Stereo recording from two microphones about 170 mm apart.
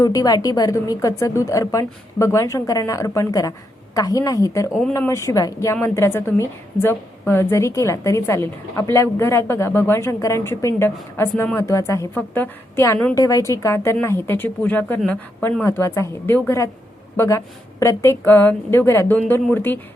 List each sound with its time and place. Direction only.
0.0 s a woman's voice: 20° left (ahead or behind)
4.7 s speech: 5° left (ahead or behind)
4.9 s a woman's voice: 15° left (ahead or behind)